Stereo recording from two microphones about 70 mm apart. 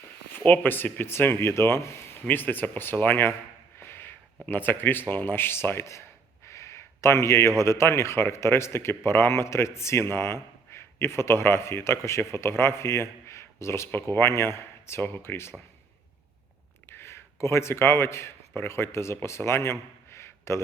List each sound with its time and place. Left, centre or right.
0.3 s speech: left
3.8 s snort: left
4.4 s speech: left
6.4 s a sound: left
7.6 s speech: left
16.9 s speech: left